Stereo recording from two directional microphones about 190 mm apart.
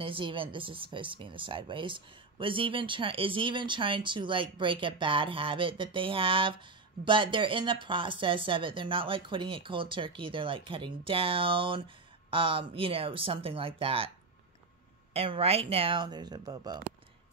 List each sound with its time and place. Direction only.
0.0 s speech: 25° right (ahead or behind)
15.1 s speech: 30° right (ahead or behind)